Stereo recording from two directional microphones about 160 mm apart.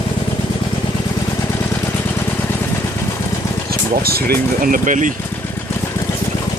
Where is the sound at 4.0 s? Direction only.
75° right (ahead or behind); by 5.1 s 55° right (ahead or behind).